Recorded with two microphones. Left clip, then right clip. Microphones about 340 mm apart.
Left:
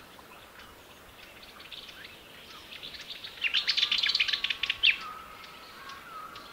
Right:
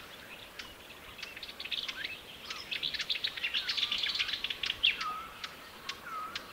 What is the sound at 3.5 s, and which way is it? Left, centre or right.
Bird, left.